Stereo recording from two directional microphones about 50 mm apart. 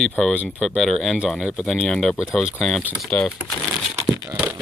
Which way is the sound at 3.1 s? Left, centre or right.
Left.